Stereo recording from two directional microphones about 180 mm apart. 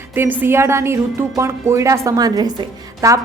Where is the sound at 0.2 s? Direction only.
10° right (ahead or behind).